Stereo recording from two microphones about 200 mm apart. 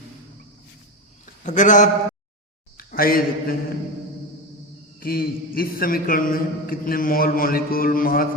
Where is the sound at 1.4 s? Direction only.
40° left (ahead or behind).